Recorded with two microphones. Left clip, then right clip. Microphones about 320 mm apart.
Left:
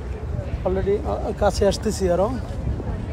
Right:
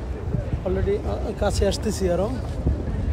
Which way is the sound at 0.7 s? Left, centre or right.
Centre.